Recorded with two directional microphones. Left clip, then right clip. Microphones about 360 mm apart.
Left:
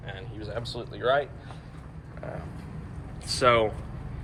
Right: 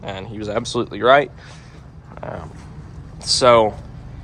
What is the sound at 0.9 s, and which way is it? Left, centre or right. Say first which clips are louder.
Speech: right 10 dB; centre.